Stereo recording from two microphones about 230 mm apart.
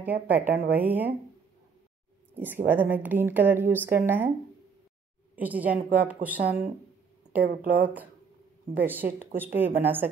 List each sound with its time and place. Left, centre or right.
0.0 s a woman's voice: centre
2.3 s a woman's voice: centre
5.3 s a woman's voice: centre
7.4 s speech: right
7.8 s a woman's voice: centre